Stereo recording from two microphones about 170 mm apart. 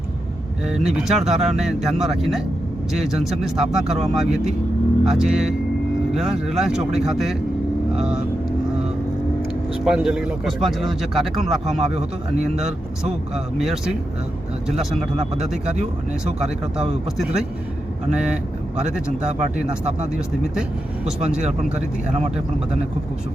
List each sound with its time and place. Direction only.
0.7 s a man's voice: 5° right (ahead or behind)
9.8 s a man's voice: 5° right (ahead or behind)
16.4 s a man's voice: 5° right (ahead or behind)
18.9 s a man's voice: 5° right (ahead or behind)